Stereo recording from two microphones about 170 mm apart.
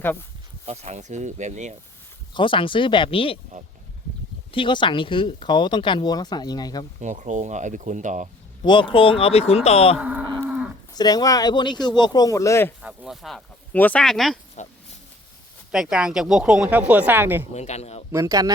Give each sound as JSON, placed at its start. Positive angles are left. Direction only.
{"t": 0.0, "sound": "speech", "side_deg": 10}
{"t": 0.6, "sound": "speech", "side_deg": -40}
{"t": 2.3, "sound": "speech", "side_deg": 30}
{"t": 4.5, "sound": "speech", "side_deg": 30}
{"t": 7.0, "sound": "speech", "side_deg": -45}
{"t": 8.6, "sound": "speech", "side_deg": 30}
{"t": 10.0, "sound": "speech", "side_deg": -5}
{"t": 10.9, "sound": "speech", "side_deg": 25}
{"t": 12.8, "sound": "speech", "side_deg": -5}
{"t": 14.6, "sound": "a sound", "side_deg": 45}
{"t": 15.7, "sound": "speech", "side_deg": -5}
{"t": 17.5, "sound": "speech", "side_deg": 40}
{"t": 18.1, "sound": "speech", "side_deg": -20}